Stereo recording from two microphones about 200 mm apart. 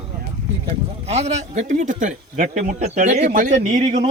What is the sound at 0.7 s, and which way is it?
A man's voice, 35° right (ahead or behind).